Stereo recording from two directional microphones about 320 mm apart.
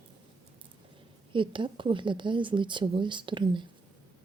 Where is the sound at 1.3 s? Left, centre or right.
Centre.